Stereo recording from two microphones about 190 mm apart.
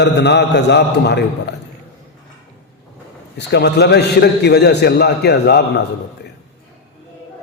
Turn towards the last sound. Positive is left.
turn(degrees=60)  # may be behind; listen again after turning